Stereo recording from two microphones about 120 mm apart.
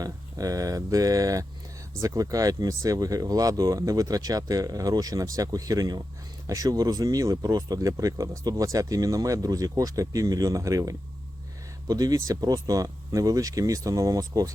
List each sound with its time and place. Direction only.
0.0 s speech: 30° right (ahead or behind)